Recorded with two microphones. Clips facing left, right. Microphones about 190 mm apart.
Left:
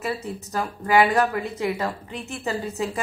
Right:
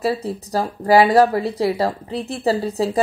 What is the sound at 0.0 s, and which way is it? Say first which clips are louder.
Speech: right 7 dB; 35° right (ahead or behind).